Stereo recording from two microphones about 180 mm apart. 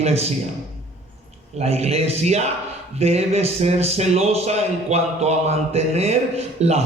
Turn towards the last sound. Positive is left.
turn(degrees=-35)  # may be behind; listen again after turning